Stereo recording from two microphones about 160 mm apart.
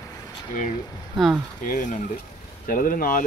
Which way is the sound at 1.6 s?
50° left (ahead or behind).